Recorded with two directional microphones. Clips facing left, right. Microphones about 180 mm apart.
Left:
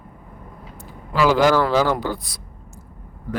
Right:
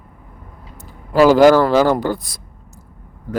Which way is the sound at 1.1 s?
40° right (ahead or behind).